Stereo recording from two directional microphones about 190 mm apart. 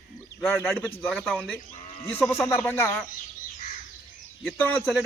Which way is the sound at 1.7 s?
35° left (ahead or behind).